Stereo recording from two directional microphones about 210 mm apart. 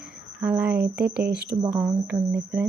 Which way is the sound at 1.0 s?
50° right (ahead or behind).